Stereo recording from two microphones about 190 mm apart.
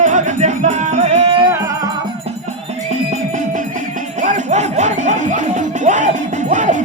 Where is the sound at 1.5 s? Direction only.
15° right (ahead or behind).